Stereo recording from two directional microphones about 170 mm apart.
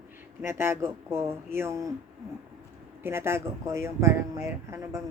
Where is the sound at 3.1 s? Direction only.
15° right (ahead or behind).